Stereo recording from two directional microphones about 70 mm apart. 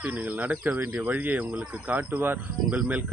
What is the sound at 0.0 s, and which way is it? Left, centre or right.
Speech, right.